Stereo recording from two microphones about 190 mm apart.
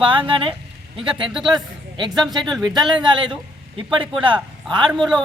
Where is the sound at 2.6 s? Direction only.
25° right (ahead or behind).